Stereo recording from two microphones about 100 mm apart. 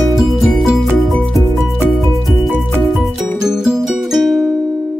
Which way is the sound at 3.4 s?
5° right (ahead or behind).